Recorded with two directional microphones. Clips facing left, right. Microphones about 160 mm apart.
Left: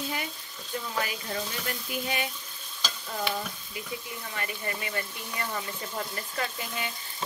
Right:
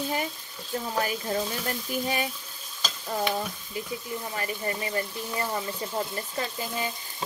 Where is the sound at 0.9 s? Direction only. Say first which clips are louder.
Right 5 dB; 35° right (ahead or behind).